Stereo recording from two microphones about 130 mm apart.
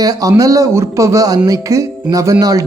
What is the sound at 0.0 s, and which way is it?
Speech, 30° right (ahead or behind).